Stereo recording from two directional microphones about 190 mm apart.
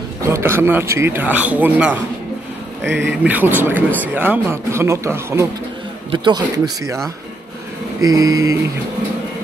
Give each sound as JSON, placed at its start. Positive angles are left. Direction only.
{"t": 0.2, "sound": "speech", "side_deg": -15}
{"t": 3.1, "sound": "speech", "side_deg": -10}
{"t": 8.0, "sound": "speech", "side_deg": -15}